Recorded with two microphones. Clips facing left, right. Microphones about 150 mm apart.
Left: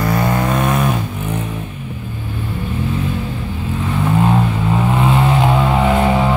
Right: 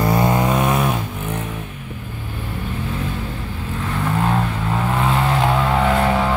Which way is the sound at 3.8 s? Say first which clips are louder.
Left 5 dB; 10° left (ahead or behind).